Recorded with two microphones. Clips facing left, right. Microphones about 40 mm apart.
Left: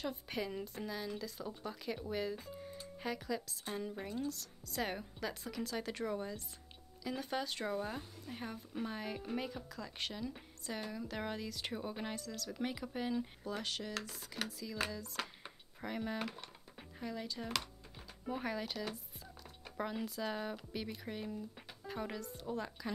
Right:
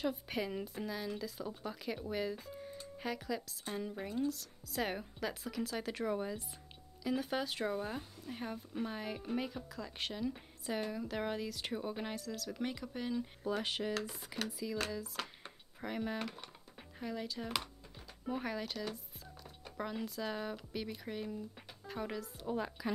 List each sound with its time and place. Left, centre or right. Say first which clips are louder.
0.0 s speech: right 3 dB; centre
13.5 s speech: right 8 dB; centre
14.9 s speech: right 1 dB; centre
22.5 s speech: right 3 dB; centre